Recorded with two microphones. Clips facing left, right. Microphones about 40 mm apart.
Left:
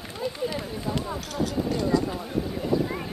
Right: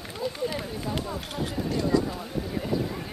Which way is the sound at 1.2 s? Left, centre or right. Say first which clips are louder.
Left 3 dB; right.